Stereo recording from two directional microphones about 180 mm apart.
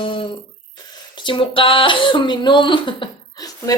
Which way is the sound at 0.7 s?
25° left (ahead or behind).